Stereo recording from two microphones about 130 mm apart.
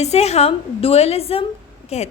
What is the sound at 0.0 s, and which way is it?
A woman's voice, 55° left (ahead or behind).